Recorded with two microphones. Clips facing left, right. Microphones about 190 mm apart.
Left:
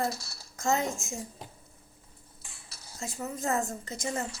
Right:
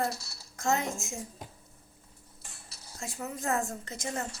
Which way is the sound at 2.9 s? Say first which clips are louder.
Left 2 dB; centre (ahead or behind).